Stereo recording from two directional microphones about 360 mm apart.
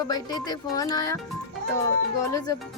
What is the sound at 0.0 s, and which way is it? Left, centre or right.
A woman's voice, centre.